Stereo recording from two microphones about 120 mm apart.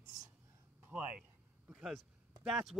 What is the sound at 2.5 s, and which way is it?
Speech, centre (ahead or behind).